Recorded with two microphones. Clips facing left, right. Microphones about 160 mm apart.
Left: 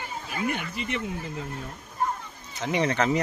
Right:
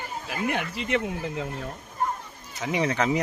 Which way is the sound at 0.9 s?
75° right (ahead or behind).